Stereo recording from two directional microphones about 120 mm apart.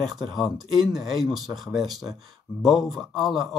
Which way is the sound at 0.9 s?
Centre (ahead or behind).